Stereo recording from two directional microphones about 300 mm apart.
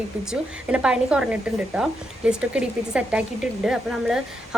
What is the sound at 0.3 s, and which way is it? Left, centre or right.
Speech, centre.